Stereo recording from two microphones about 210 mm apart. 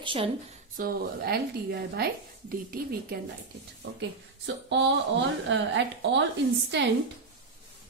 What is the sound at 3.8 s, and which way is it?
Speech, 60° right (ahead or behind).